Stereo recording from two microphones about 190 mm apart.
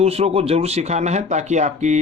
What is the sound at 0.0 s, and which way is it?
Speech, 30° right (ahead or behind).